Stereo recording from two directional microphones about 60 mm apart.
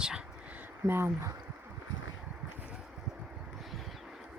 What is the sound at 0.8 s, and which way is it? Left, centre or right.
Speech, right.